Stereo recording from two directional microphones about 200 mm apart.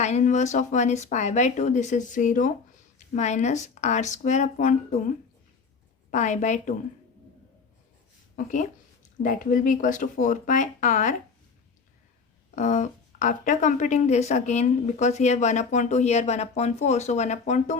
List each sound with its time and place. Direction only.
0.0 s a woman's voice: 35° left (ahead or behind)
8.4 s a woman's voice: 40° left (ahead or behind)
12.5 s a woman's voice: 35° left (ahead or behind)